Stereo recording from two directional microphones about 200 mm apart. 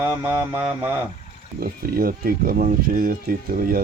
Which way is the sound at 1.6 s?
50° right (ahead or behind).